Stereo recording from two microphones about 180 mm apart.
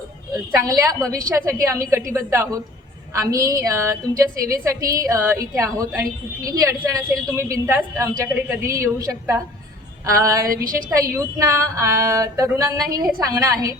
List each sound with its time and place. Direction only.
0.6 s a woman's voice: 20° right (ahead or behind)
10.5 s a woman's voice: 50° right (ahead or behind)
10.8 s a woman's voice: 15° right (ahead or behind)